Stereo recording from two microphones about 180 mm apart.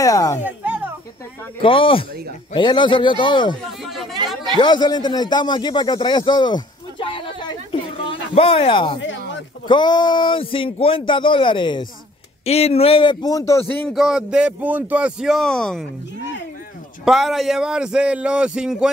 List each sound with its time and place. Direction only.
0.0 s speech: 20° left (ahead or behind)
0.5 s a sound: 10° right (ahead or behind)
1.6 s speech: 30° left (ahead or behind)
3.6 s a sound: centre (ahead or behind)
4.6 s speech: 25° left (ahead or behind)
13.8 s speech: centre (ahead or behind)
17.0 s speech: centre (ahead or behind)